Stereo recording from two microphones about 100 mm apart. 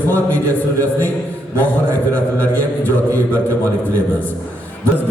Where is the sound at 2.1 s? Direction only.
15° left (ahead or behind).